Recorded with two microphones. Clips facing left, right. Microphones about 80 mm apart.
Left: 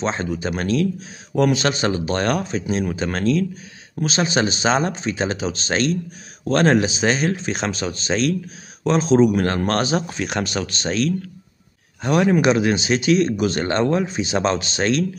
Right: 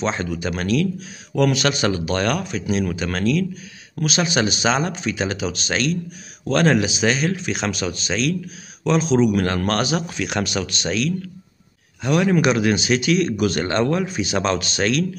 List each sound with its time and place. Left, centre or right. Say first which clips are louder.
0.0 s speech: even; left